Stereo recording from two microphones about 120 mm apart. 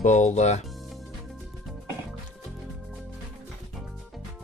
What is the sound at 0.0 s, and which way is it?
Speech, 85° left.